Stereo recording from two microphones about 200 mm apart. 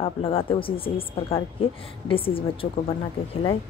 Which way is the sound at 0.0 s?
30° left (ahead or behind).